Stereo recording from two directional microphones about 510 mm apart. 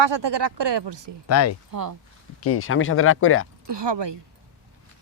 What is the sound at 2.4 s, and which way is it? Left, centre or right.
Speech, left.